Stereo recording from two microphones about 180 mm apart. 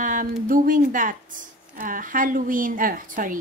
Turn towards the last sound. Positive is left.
turn(degrees=-50)  # may be behind; listen again after turning